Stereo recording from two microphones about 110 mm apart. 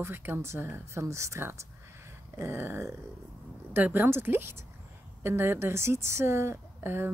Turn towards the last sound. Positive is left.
turn(degrees=-20)  # may be behind; listen again after turning